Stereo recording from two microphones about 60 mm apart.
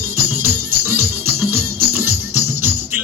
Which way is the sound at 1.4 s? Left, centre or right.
Right.